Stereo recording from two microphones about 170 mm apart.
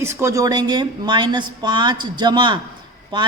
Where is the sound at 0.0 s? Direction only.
15° right (ahead or behind).